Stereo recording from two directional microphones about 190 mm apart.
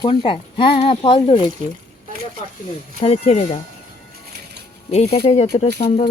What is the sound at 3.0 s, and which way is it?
Speech, 30° left (ahead or behind).